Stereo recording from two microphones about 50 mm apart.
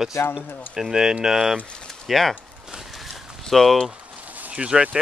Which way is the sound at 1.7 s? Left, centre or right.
Centre.